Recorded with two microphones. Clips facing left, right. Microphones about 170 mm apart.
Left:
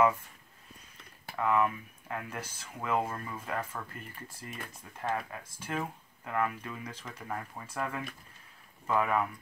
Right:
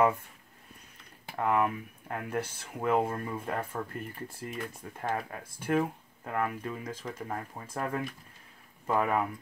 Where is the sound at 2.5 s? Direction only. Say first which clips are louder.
Right 3 dB; 50° right (ahead or behind).